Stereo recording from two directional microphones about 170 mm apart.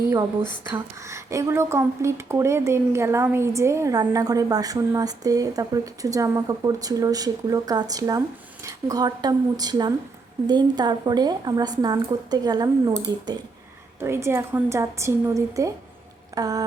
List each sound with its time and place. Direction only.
0.1 s a woman's voice: 20° right (ahead or behind)